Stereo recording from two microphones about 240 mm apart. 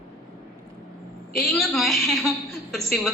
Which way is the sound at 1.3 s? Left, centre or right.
Centre.